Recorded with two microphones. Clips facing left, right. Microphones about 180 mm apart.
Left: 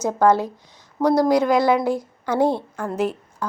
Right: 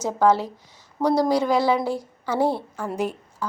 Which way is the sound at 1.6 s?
15° left (ahead or behind).